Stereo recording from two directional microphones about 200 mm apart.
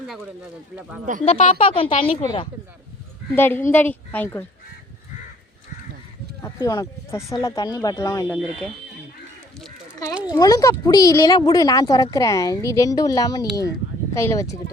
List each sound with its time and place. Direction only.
0.8 s speech: 5° right (ahead or behind)
1.2 s speech: 35° left (ahead or behind)
3.3 s speech: 10° left (ahead or behind)
6.4 s speech: 20° left (ahead or behind)
8.4 s speech: centre (ahead or behind)
10.3 s speech: 20° left (ahead or behind)